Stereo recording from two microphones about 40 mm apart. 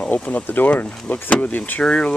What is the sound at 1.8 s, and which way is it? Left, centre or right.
Speech, left.